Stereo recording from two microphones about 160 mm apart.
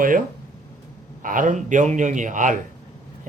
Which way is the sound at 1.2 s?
55° right (ahead or behind).